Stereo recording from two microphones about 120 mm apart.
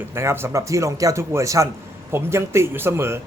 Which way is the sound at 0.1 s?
20° right (ahead or behind).